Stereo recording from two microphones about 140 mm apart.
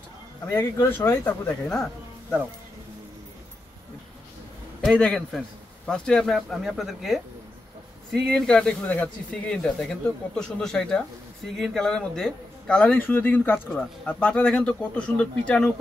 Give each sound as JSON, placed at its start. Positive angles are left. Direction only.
{"t": 0.5, "sound": "speech", "side_deg": 20}
{"t": 4.8, "sound": "speech", "side_deg": 5}